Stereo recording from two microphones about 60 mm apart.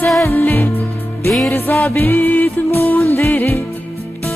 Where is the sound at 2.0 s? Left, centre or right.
Left.